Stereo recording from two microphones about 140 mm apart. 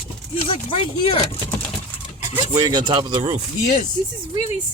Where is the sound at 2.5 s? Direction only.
30° right (ahead or behind).